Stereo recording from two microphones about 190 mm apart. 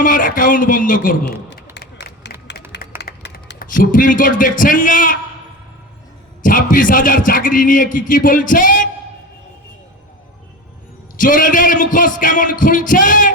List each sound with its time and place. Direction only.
0.0 s a man's voice: 45° left (ahead or behind)
1.2 s speech: 65° left (ahead or behind)
2.5 s a sound: 55° left (ahead or behind)
3.0 s speech: 60° left (ahead or behind)
6.4 s a man's voice: 45° left (ahead or behind)
11.2 s a man's voice: 45° left (ahead or behind)